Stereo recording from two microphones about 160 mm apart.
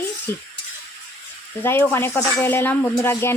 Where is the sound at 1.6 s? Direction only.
15° left (ahead or behind).